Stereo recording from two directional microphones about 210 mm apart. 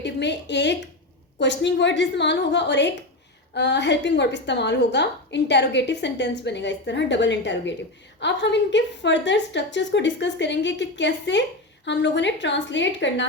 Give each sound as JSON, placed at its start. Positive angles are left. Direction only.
{"t": 0.0, "sound": "a woman's voice", "side_deg": 55}